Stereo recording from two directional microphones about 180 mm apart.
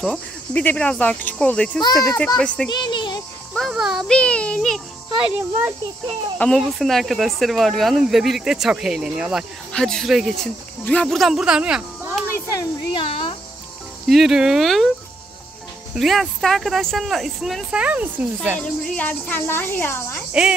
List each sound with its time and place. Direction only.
0.0 s speech: 5° left (ahead or behind)
2.7 s a child's voice: 25° left (ahead or behind)
3.5 s speech: centre (ahead or behind)
6.3 s speech: 5° left (ahead or behind)
13.1 s cricket: 35° left (ahead or behind)
14.0 s speech: centre (ahead or behind)
15.9 s speech: centre (ahead or behind)
18.6 s speech: 10° left (ahead or behind)